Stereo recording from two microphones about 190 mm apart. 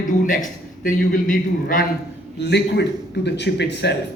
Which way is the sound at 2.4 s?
60° left (ahead or behind).